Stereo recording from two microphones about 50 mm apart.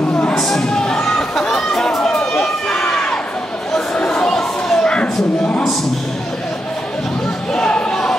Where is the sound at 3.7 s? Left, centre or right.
Centre.